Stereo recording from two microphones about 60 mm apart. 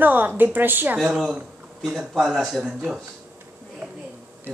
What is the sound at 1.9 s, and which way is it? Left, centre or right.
Speech, centre.